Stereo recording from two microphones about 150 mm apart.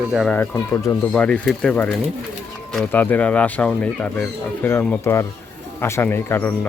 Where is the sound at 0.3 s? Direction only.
15° left (ahead or behind).